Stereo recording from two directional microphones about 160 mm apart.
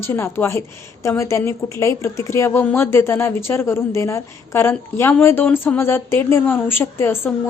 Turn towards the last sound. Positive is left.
turn(degrees=15)  # may be behind; listen again after turning